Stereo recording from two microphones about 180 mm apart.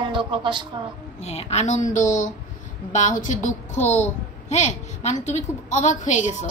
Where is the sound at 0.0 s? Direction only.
25° right (ahead or behind).